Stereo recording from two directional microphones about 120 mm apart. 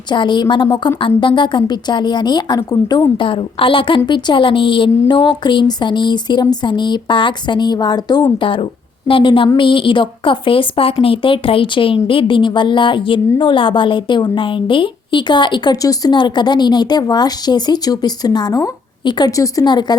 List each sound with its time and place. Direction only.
0.1 s a woman's voice: 40° left (ahead or behind)
3.2 s a woman's voice: 45° left (ahead or behind)
8.4 s a woman's voice: 45° left (ahead or behind)